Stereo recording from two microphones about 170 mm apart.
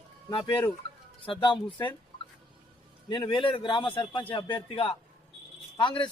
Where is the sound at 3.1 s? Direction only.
30° left (ahead or behind).